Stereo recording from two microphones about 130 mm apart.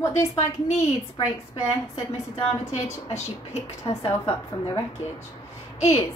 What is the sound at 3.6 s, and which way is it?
Speech, 50° left (ahead or behind).